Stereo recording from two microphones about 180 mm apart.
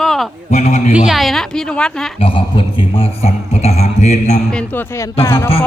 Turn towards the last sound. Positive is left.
turn(degrees=15)  # may be behind; listen again after turning